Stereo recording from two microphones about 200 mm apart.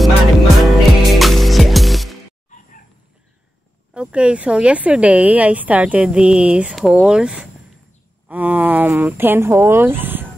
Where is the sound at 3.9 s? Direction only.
5° right (ahead or behind).